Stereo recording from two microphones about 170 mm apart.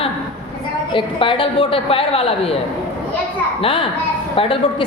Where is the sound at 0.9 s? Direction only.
30° left (ahead or behind).